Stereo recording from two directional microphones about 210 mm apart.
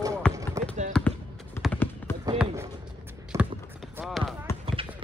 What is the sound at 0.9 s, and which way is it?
Basketball bounce, 5° left (ahead or behind).